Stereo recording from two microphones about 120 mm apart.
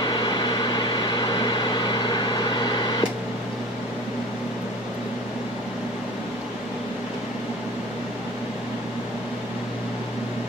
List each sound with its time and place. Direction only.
0.0 s microwave oven: 40° left (ahead or behind)